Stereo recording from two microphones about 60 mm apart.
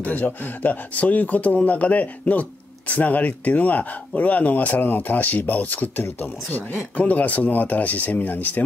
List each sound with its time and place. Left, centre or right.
0.0 s speech: left